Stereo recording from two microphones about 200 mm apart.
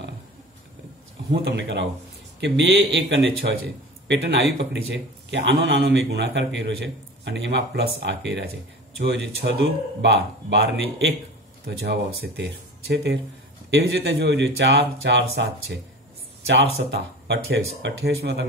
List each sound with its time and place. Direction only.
1.3 s a man's voice: 60° right (ahead or behind)